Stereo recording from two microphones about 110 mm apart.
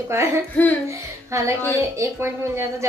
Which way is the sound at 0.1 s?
25° right (ahead or behind).